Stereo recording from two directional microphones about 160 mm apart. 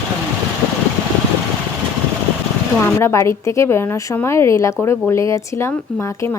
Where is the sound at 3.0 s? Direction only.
15° left (ahead or behind).